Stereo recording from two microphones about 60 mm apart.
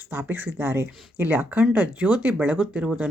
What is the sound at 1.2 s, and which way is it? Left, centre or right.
Speech, right.